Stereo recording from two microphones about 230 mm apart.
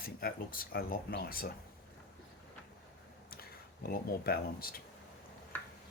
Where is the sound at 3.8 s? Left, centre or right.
Left.